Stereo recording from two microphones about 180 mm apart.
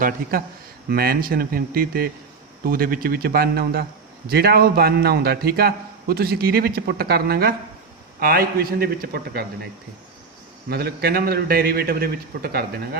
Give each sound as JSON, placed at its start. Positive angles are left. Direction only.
{"t": 0.0, "sound": "a man's voice", "side_deg": -55}
{"t": 10.7, "sound": "a man's voice", "side_deg": -60}